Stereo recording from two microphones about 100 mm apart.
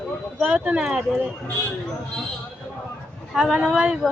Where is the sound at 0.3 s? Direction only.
10° right (ahead or behind).